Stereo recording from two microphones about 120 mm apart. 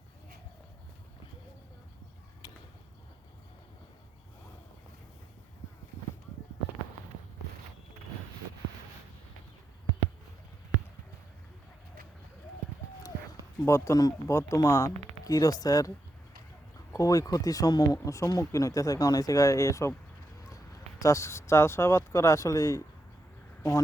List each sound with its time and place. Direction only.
2.4 s a sound: 30° left (ahead or behind)
13.7 s speech: 25° left (ahead or behind)
16.9 s speech: 30° left (ahead or behind)
21.0 s speech: 25° left (ahead or behind)